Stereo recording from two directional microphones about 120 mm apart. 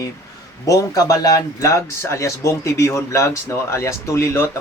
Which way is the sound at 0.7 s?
30° left (ahead or behind).